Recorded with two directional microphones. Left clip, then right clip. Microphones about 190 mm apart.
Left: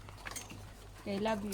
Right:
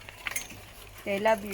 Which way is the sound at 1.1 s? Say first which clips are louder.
Right 9 dB; 20° right (ahead or behind).